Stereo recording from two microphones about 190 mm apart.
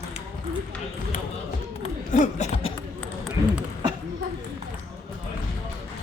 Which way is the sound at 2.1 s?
40° left (ahead or behind).